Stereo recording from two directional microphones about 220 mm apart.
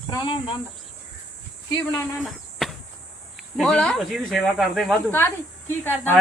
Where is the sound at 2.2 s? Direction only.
Centre (ahead or behind).